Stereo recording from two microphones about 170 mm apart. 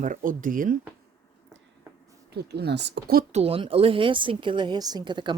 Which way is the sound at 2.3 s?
75° right (ahead or behind).